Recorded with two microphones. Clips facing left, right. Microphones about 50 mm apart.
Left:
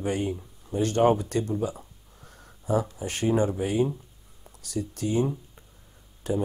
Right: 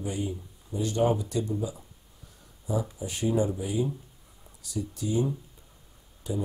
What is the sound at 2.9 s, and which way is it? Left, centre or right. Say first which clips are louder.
Speech: left 2 dB; left.